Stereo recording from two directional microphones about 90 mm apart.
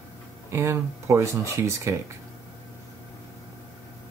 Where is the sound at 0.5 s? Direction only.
30° right (ahead or behind).